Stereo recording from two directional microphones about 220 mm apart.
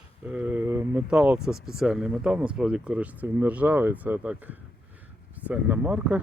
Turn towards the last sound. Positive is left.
turn(degrees=-5)  # may be behind; listen again after turning